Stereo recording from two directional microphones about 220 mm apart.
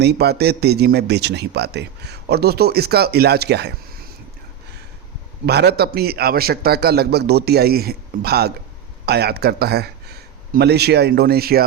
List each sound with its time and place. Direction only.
0.0 s a man's voice: 50° right (ahead or behind)
5.5 s a man's voice: 50° right (ahead or behind)